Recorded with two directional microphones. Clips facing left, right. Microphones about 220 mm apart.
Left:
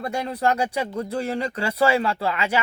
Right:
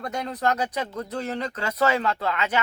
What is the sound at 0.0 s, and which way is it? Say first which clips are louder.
Speech: left 3 dB; 10° left (ahead or behind).